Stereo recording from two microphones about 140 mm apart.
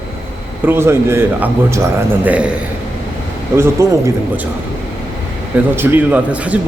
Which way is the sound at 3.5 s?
20° right (ahead or behind).